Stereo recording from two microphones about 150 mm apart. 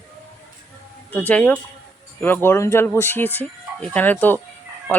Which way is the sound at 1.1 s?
10° left (ahead or behind).